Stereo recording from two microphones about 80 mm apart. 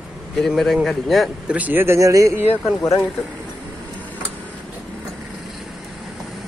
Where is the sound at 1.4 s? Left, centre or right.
Centre.